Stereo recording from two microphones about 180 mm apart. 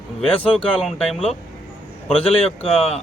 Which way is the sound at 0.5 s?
Centre (ahead or behind).